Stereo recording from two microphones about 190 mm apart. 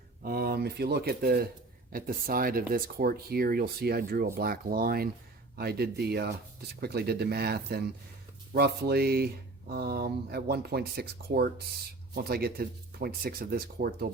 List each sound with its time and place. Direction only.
0.2 s speech: 50° right (ahead or behind)